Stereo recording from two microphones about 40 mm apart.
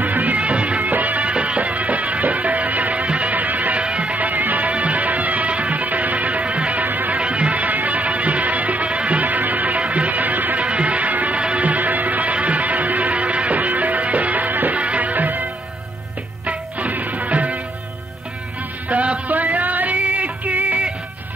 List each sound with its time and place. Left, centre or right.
0.0 s music: right
3.8 s music: right
6.8 s music: right
7.2 s music: right
10.6 s music: right
11.3 s music: right
16.4 s music: right
18.9 s music: right